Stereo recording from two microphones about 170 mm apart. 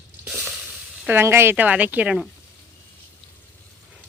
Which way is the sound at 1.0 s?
15° right (ahead or behind).